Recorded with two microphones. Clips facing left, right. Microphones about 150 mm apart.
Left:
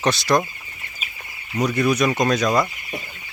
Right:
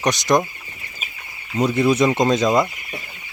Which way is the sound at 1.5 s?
25° right (ahead or behind).